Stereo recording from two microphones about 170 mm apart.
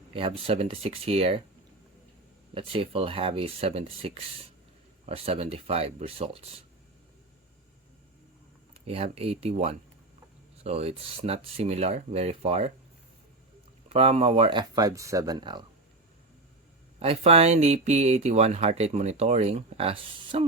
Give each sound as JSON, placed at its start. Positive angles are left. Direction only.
{"t": 0.1, "sound": "speech", "side_deg": -30}
{"t": 2.6, "sound": "speech", "side_deg": -30}
{"t": 9.1, "sound": "speech", "side_deg": -35}
{"t": 13.8, "sound": "speech", "side_deg": -40}
{"t": 17.0, "sound": "speech", "side_deg": -35}